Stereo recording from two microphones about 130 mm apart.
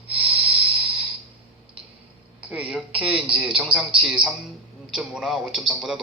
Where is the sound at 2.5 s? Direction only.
10° right (ahead or behind).